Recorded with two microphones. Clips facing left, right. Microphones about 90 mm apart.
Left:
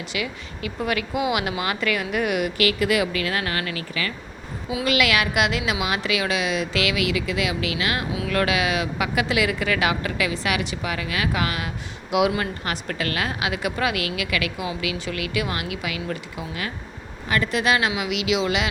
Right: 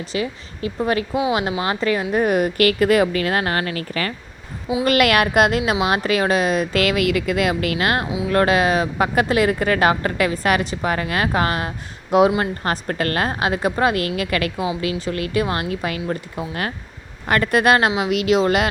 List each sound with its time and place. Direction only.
0.0 s a woman's voice: 35° right (ahead or behind)
8.3 s a woman's voice: 35° right (ahead or behind)
17.2 s speech: 55° right (ahead or behind)